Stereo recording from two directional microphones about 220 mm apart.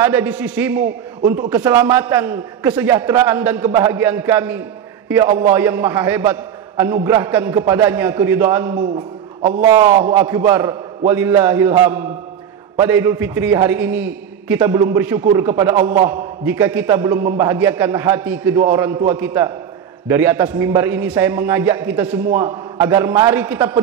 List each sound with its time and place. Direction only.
0.0 s a man's voice: 10° right (ahead or behind)